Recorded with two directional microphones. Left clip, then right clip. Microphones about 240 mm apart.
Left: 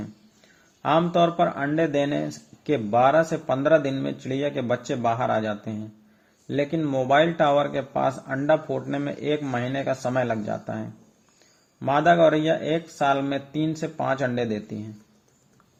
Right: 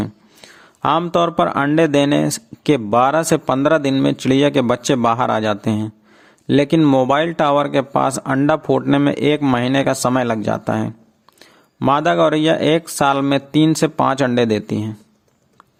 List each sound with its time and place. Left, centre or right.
0.0 s speech: right